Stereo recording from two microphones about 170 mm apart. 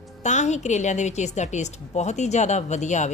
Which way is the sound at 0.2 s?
45° left (ahead or behind).